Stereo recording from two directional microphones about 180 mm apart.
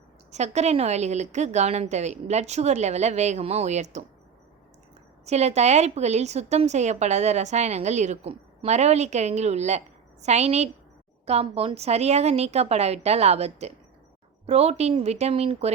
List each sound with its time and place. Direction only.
0.3 s a woman's voice: 40° right (ahead or behind)
5.2 s a woman's voice: 40° right (ahead or behind)